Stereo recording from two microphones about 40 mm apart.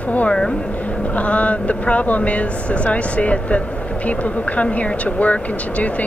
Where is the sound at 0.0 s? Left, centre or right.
Left.